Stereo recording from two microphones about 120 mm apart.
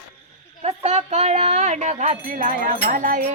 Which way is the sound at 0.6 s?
65° right (ahead or behind).